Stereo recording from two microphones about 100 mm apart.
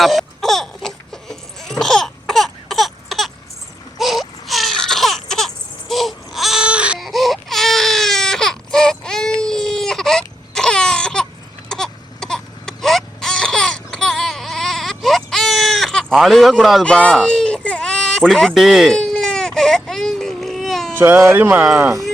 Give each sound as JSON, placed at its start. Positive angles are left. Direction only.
{"t": 0.0, "sound": "baby cry", "side_deg": 0}
{"t": 7.0, "sound": "baby cry", "side_deg": 0}
{"t": 16.8, "sound": "a sound", "side_deg": 10}
{"t": 20.9, "sound": "speech", "side_deg": -20}